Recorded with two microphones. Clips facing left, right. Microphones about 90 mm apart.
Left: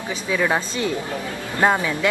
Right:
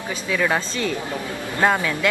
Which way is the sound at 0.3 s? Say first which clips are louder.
Left 1 dB; 15° left (ahead or behind).